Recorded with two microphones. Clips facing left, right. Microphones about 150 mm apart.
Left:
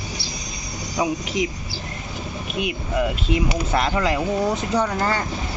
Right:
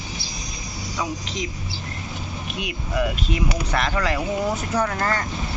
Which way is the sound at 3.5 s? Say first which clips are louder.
Left 3 dB; 25° left (ahead or behind).